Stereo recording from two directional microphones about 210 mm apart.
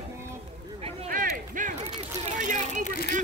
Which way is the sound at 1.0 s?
40° right (ahead or behind).